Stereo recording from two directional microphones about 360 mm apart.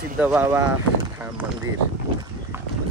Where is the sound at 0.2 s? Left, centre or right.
Centre.